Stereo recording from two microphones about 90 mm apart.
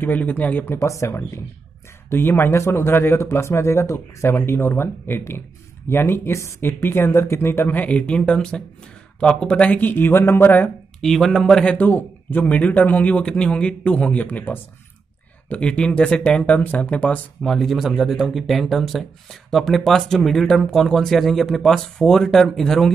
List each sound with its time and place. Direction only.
0.0 s speech: 20° left (ahead or behind)
0.7 s speech: 35° left (ahead or behind)
11.0 s a man's voice: 5° left (ahead or behind)
17.4 s speech: 5° left (ahead or behind)